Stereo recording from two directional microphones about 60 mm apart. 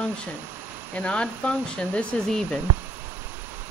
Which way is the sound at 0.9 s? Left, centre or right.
Centre.